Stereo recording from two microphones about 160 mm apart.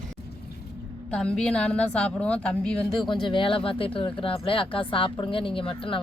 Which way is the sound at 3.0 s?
30° left (ahead or behind).